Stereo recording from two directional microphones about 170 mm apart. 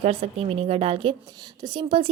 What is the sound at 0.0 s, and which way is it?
A woman's voice, 35° right (ahead or behind).